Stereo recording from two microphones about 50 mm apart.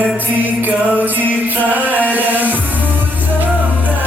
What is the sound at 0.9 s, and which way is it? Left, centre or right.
Music, right.